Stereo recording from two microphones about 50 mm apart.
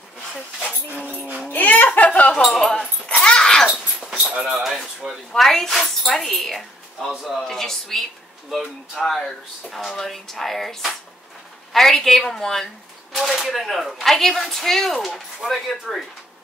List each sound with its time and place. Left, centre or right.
1.5 s music: left
1.9 s chink: left
2.4 s speech: centre
3.1 s a sound: left
3.4 s a sound: centre
3.7 s dog: centre
4.5 s dishes: centre
5.3 s speech: centre